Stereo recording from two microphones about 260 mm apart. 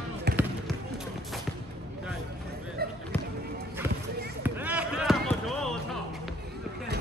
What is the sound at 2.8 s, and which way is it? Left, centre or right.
Basketball bounce, right.